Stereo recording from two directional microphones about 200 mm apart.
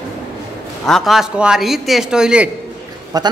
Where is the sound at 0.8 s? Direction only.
Centre (ahead or behind).